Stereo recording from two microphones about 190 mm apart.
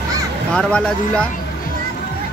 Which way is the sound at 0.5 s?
5° left (ahead or behind).